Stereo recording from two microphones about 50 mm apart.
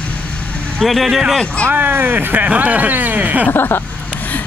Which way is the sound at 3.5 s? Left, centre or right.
Left.